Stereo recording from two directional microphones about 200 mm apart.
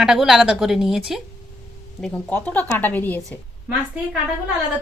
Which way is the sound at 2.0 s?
5° left (ahead or behind).